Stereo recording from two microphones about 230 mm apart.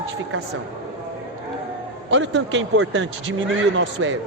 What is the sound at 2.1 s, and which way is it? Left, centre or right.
Speech, right.